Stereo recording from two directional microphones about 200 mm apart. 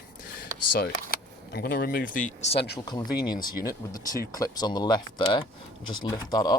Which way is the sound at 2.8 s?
20° left (ahead or behind).